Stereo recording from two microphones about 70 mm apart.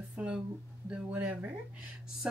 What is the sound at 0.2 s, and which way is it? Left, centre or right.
Speech, centre.